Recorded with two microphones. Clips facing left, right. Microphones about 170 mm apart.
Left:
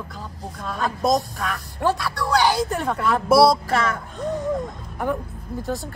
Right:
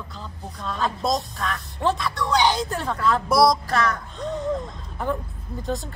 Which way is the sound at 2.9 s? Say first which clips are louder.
Right 2 dB; 15° left (ahead or behind).